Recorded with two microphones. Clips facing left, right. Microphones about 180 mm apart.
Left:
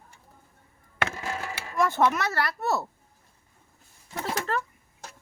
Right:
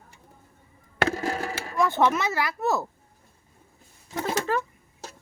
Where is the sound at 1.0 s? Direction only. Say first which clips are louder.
Right 6 dB; 35° right (ahead or behind).